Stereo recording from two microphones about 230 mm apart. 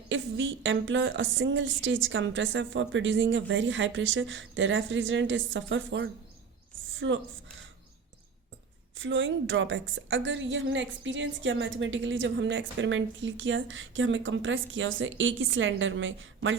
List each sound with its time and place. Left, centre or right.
0.1 s a woman's voice: right
9.0 s a woman's voice: right